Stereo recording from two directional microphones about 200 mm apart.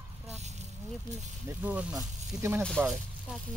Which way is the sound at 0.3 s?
35° right (ahead or behind).